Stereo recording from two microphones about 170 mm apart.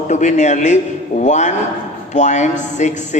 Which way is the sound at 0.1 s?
45° left (ahead or behind).